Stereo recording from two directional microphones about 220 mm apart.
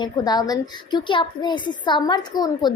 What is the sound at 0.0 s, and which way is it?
A woman's voice, 20° left (ahead or behind).